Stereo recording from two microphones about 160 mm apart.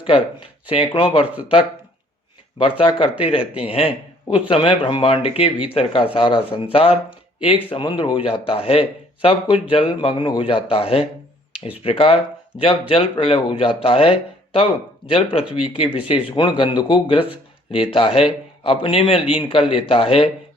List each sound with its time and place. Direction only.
0.0 s a man's voice: 35° left (ahead or behind)
2.6 s a man's voice: 30° left (ahead or behind)